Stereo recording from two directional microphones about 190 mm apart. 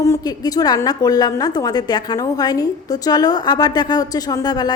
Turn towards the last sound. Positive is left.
turn(degrees=20)  # may be behind; listen again after turning